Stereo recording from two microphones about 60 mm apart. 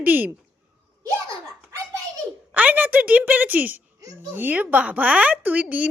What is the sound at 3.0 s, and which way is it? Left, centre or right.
A woman's voice, right.